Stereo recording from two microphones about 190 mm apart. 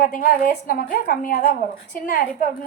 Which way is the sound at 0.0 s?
45° left (ahead or behind).